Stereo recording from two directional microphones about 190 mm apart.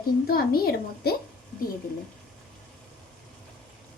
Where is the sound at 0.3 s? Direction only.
50° left (ahead or behind).